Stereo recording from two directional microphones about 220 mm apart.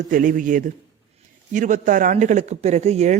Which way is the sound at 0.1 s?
35° right (ahead or behind).